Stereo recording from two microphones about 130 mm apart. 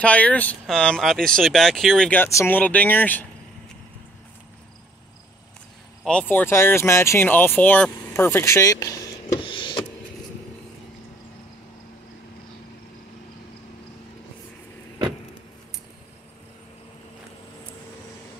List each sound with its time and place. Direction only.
0.0 s speech: 10° left (ahead or behind)
2.0 s speech: 15° left (ahead or behind)
6.0 s speech: 10° left (ahead or behind)
9.4 s a sound: 35° left (ahead or behind)